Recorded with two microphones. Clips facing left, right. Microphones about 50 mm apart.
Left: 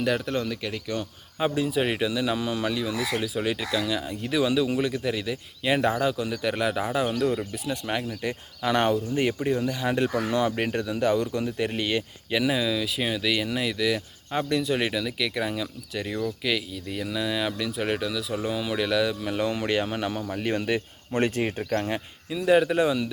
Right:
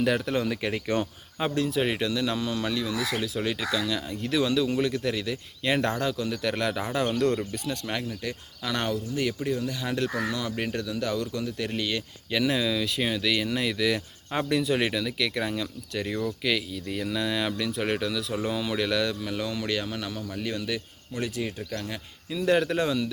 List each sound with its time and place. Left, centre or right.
0.0 s speech: centre; by 1.0 s right
1.4 s speech: centre; by 20.8 s left
21.1 s speech: left
21.7 s speech: left
22.3 s speech: centre